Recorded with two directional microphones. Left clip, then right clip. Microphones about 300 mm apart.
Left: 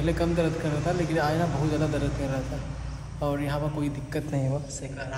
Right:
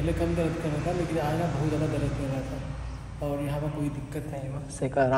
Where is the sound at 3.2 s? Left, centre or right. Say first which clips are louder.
Left 3 dB; centre.